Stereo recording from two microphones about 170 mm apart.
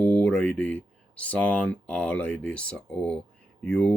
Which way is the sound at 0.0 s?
10° left (ahead or behind).